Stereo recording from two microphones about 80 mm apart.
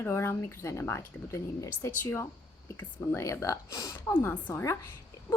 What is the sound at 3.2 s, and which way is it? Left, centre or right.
Speech, left.